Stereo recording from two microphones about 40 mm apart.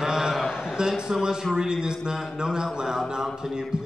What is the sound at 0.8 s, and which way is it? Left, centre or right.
A man's voice, centre.